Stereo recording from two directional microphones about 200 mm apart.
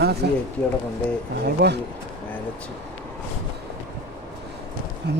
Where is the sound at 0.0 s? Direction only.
55° right (ahead or behind).